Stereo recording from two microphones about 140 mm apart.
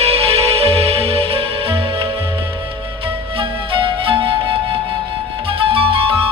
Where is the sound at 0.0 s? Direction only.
45° right (ahead or behind).